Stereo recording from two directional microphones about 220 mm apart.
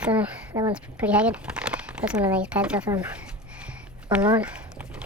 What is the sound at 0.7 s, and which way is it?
Speech, 5° right (ahead or behind).